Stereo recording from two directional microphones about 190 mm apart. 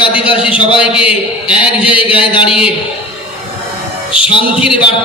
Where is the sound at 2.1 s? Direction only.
25° left (ahead or behind).